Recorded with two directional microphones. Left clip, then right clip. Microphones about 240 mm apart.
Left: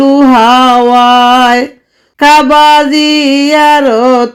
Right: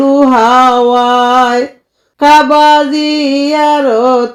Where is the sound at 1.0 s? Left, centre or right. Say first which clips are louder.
Left 3 dB; left.